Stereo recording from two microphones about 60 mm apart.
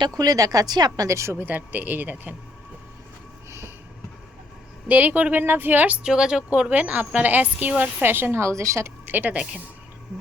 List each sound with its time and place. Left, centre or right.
0.1 s speech: right
1.4 s speech: right
4.9 s a woman's voice: right
6.0 s a woman's voice: centre; by 8.4 s right
8.4 s speech: right
9.0 s speech: right